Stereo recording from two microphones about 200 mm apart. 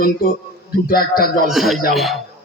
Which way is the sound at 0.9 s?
50° left (ahead or behind).